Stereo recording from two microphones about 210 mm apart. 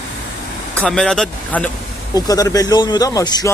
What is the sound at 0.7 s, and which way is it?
Speech, 5° left (ahead or behind).